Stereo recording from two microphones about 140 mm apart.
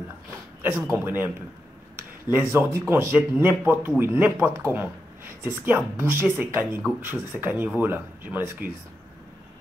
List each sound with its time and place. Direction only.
0.6 s speech: 15° right (ahead or behind)